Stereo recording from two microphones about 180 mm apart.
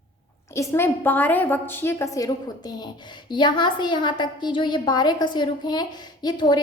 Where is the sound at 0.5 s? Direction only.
15° left (ahead or behind).